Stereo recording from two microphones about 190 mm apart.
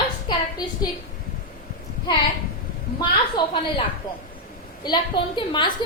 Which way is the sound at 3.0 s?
25° left (ahead or behind).